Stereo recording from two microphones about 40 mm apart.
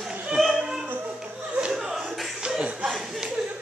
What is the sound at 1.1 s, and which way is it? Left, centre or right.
Laughter, centre.